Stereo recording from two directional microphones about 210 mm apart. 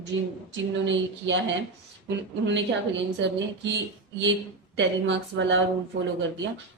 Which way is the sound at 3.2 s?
60° right (ahead or behind).